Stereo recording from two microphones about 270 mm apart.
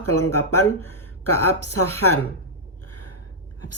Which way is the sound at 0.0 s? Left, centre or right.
Left.